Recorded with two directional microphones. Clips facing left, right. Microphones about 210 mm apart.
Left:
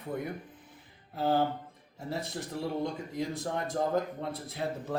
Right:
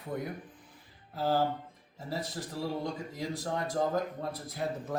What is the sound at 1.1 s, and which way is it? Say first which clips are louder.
Speech: left 1 dB; 25° left (ahead or behind).